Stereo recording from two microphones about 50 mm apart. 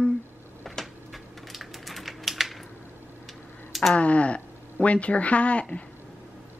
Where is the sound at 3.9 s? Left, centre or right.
Left.